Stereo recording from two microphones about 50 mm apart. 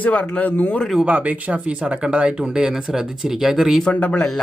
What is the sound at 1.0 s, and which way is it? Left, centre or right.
Speech, right.